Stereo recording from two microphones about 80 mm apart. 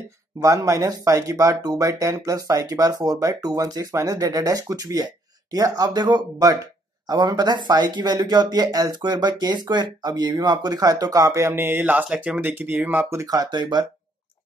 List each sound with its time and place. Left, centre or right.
0.4 s speech: right
6.5 s speech: right
13.1 s speech: right
13.4 s speech: right